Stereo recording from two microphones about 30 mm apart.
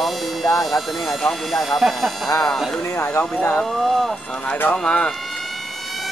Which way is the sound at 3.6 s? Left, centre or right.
Centre.